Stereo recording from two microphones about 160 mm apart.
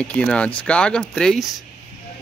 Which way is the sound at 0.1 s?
5° left (ahead or behind).